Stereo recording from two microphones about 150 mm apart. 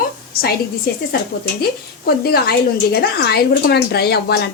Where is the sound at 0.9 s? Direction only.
90° left.